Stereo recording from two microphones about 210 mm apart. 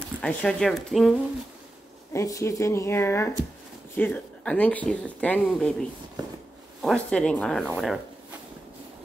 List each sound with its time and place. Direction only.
0.2 s speech: 5° left (ahead or behind)
2.1 s speech: 15° left (ahead or behind)
6.2 s a sound: 20° right (ahead or behind)
6.8 s speech: 5° left (ahead or behind)